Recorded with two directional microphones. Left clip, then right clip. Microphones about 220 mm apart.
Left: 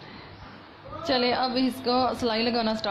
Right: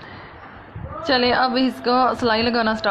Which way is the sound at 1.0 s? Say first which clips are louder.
Right 7 dB; 15° right (ahead or behind).